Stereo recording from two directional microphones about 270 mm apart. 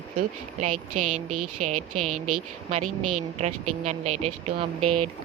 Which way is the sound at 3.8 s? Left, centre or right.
Right.